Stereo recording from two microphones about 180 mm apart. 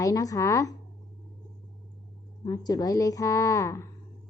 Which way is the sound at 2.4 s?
20° left (ahead or behind).